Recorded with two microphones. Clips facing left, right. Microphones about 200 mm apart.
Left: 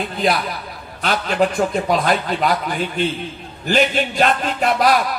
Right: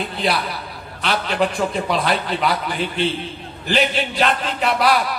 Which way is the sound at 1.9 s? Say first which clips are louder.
Left 2 dB; 45° left (ahead or behind).